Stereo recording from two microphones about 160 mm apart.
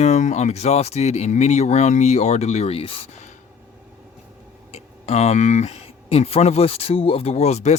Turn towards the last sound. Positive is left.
turn(degrees=45)  # may be behind; listen again after turning